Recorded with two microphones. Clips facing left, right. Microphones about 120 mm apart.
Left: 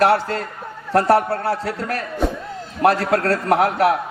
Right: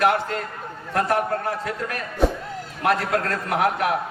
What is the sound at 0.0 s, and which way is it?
A man's voice, 35° left (ahead or behind).